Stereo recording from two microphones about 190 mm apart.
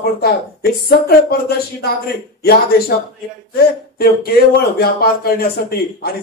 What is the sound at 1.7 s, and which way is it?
Speech, 55° left (ahead or behind).